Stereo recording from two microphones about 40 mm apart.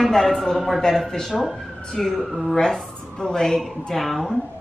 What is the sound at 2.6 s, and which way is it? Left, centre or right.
Speech, centre.